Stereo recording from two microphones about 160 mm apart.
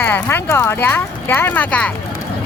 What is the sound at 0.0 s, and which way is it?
Speech, 15° left (ahead or behind).